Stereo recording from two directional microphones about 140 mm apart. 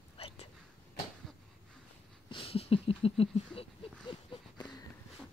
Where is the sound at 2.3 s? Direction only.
40° left (ahead or behind).